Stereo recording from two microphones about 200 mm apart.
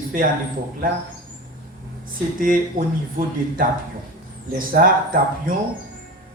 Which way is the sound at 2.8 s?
45° right (ahead or behind).